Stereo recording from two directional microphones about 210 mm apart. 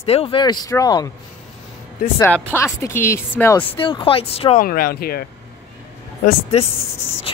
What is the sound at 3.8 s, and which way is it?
Speech, 25° left (ahead or behind).